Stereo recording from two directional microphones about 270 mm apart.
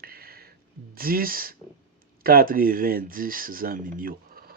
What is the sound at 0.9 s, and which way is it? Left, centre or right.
Speech, right.